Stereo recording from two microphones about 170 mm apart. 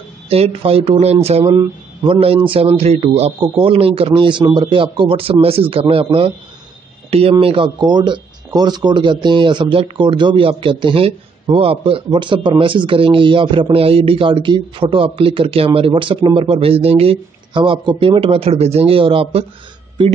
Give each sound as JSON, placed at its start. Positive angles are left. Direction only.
{"t": 0.3, "sound": "speech", "side_deg": -35}